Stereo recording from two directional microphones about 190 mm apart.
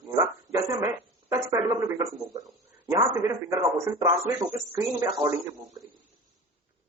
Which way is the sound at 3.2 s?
15° right (ahead or behind).